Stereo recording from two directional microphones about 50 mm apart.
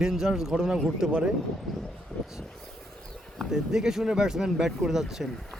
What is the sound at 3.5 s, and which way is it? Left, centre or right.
Speech, centre.